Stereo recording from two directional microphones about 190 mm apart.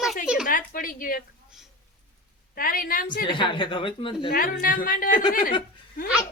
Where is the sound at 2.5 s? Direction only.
50° left (ahead or behind).